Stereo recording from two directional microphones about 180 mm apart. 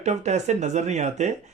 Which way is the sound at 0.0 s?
40° right (ahead or behind).